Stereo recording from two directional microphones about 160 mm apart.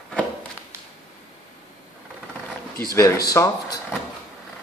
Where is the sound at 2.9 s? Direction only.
20° left (ahead or behind).